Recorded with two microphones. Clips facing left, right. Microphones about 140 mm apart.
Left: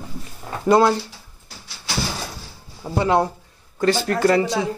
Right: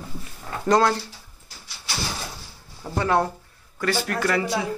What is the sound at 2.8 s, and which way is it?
Speech, 15° left (ahead or behind).